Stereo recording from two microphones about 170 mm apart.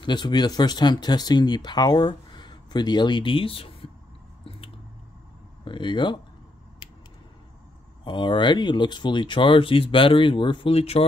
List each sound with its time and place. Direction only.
0.0 s speech: 25° left (ahead or behind)
5.7 s speech: 30° left (ahead or behind)
8.0 s speech: 30° left (ahead or behind)